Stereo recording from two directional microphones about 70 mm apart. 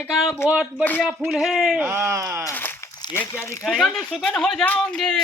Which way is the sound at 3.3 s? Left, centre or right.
Left.